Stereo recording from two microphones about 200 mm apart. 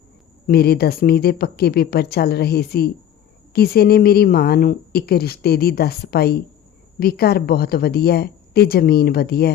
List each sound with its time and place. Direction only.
0.4 s a woman's voice: 50° left (ahead or behind)